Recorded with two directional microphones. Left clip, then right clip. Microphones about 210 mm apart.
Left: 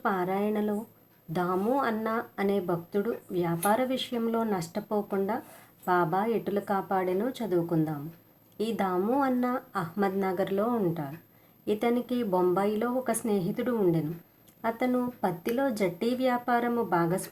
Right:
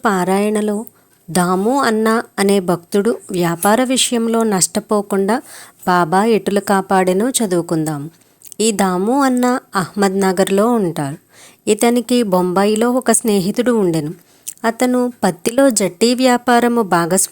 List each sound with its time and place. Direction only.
0.0 s speech: 45° right (ahead or behind)